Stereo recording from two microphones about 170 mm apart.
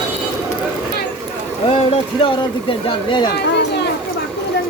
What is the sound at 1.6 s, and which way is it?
Speech, 35° left (ahead or behind).